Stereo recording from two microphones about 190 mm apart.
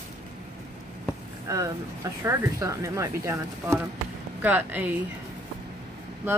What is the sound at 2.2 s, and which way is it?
Speech, 15° right (ahead or behind).